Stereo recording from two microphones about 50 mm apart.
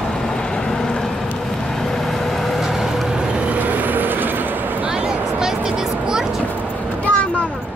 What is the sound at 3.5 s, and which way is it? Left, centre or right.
Vehicle, right.